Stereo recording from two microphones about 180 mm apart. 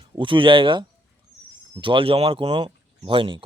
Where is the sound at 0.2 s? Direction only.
30° right (ahead or behind).